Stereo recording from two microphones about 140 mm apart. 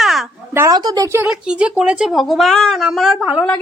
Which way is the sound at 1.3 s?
5° right (ahead or behind).